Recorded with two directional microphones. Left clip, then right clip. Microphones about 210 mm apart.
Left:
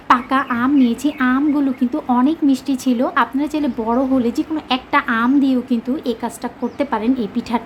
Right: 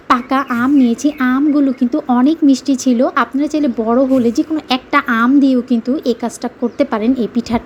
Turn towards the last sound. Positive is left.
turn(degrees=-20)  # may be behind; listen again after turning